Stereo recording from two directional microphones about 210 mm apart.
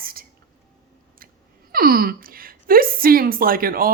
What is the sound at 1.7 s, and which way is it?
A woman's voice, 45° right (ahead or behind).